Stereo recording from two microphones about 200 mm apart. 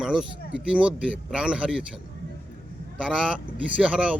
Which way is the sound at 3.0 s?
5° right (ahead or behind).